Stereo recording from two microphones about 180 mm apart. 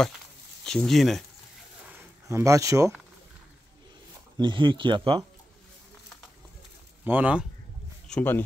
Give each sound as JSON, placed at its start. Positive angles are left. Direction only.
{"t": 0.7, "sound": "speech", "side_deg": 0}
{"t": 1.9, "sound": "a sound", "side_deg": -15}
{"t": 4.4, "sound": "speech", "side_deg": -25}
{"t": 7.1, "sound": "speech", "side_deg": -10}
{"t": 8.1, "sound": "speech", "side_deg": 10}